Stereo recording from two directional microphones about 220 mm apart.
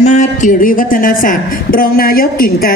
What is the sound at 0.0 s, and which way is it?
A woman's voice, 30° left (ahead or behind).